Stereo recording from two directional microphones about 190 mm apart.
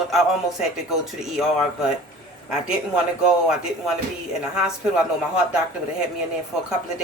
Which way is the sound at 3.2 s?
5° right (ahead or behind).